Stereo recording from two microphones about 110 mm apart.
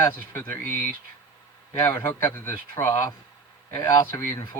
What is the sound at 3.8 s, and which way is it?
Speech, 35° left (ahead or behind).